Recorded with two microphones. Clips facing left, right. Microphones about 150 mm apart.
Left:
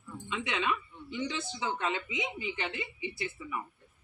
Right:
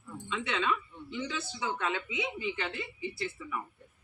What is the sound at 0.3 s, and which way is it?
Speech, 20° left (ahead or behind).